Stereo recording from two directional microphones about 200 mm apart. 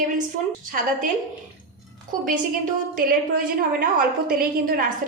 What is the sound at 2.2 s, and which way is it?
A woman's voice, 40° right (ahead or behind).